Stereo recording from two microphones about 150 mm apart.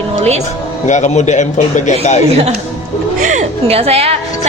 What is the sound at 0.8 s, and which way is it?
A man's voice, 55° left (ahead or behind).